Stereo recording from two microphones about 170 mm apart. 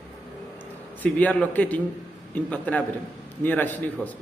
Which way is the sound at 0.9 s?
10° left (ahead or behind).